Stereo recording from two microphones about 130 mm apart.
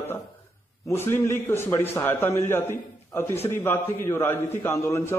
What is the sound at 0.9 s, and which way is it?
A man's voice, 20° left (ahead or behind).